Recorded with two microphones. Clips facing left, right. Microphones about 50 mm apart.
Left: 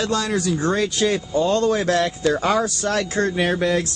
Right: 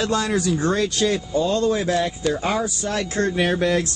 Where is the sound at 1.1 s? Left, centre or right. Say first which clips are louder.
Left 1 dB; left.